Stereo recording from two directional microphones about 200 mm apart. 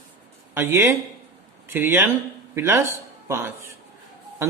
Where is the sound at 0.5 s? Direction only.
10° right (ahead or behind).